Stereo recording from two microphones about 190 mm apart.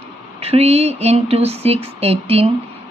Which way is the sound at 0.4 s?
30° right (ahead or behind).